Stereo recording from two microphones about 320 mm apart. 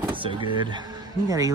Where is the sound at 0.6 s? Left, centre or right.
Centre.